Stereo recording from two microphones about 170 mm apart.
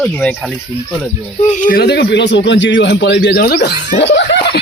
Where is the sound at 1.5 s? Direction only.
55° left (ahead or behind); by 4.6 s 90° left.